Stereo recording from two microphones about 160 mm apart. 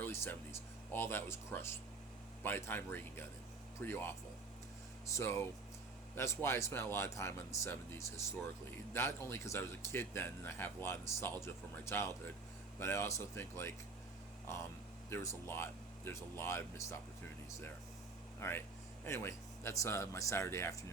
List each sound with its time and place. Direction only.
0.0 s a sound: 15° left (ahead or behind)
0.9 s speech: 15° left (ahead or behind)
5.1 s speech: 15° left (ahead or behind)
15.1 s speech: 15° left (ahead or behind)
18.3 s speech: 15° left (ahead or behind)